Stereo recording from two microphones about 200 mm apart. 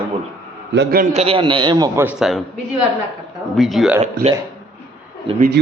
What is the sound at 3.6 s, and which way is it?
Speech, centre (ahead or behind).